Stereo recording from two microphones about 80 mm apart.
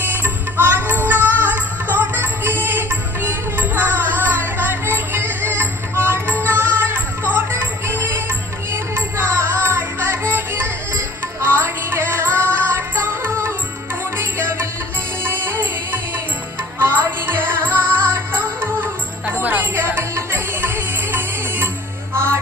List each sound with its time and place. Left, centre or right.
0.1 s music: right
17.7 s music: centre
18.3 s music: right